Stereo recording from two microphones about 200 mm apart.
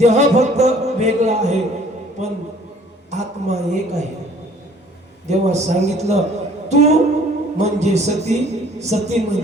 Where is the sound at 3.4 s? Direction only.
35° right (ahead or behind).